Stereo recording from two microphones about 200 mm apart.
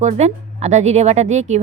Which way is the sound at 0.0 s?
35° right (ahead or behind).